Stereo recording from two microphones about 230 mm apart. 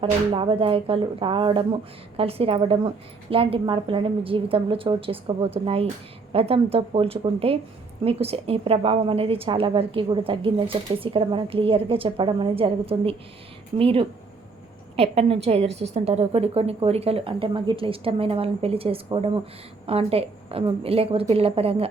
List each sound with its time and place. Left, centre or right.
0.0 s speech: right